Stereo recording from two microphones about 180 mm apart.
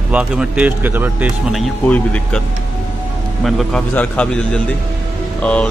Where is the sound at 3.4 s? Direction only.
Centre (ahead or behind).